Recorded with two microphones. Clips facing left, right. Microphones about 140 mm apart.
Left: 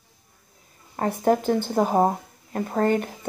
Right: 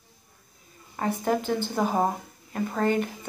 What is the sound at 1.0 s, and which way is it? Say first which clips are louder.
Speech: left 4 dB; 45° left (ahead or behind).